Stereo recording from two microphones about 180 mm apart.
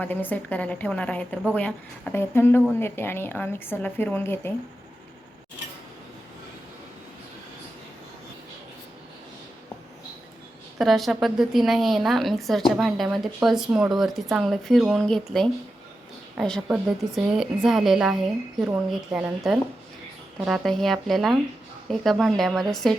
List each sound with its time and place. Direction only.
0.0 s speech: 10° left (ahead or behind)
10.8 s a woman's voice: centre (ahead or behind)